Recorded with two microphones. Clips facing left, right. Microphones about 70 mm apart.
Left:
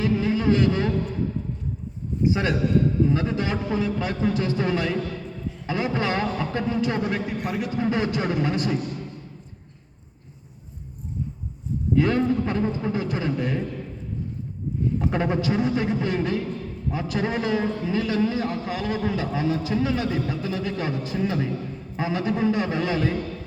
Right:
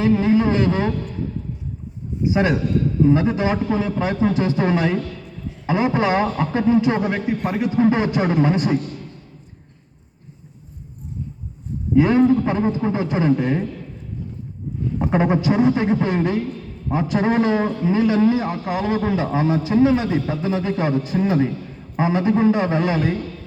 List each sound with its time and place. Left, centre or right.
0.0 s a man's voice: right
2.3 s a man's voice: right
11.9 s a man's voice: centre
15.0 s a man's voice: right